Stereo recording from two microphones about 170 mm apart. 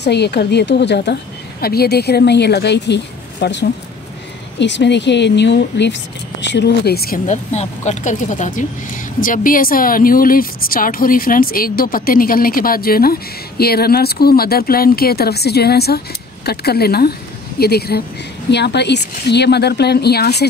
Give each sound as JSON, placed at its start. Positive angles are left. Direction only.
{"t": 0.0, "sound": "a woman's voice", "side_deg": 75}
{"t": 1.6, "sound": "a woman's voice", "side_deg": 65}
{"t": 7.2, "sound": "a woman's voice", "side_deg": 40}
{"t": 18.5, "sound": "a woman's voice", "side_deg": 80}